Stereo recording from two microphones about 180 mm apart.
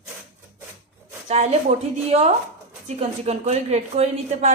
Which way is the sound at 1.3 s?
35° right (ahead or behind).